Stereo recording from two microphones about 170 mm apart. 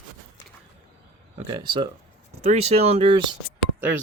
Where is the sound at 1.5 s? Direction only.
25° right (ahead or behind).